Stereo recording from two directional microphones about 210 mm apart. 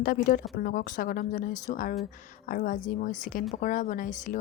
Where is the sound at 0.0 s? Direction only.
45° left (ahead or behind).